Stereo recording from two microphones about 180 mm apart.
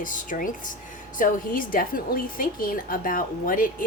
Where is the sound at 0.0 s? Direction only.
45° left (ahead or behind).